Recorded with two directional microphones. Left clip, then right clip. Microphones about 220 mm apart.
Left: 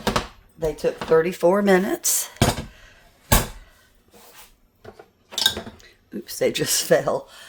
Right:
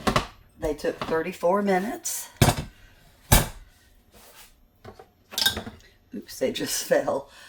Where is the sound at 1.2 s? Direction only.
50° left (ahead or behind).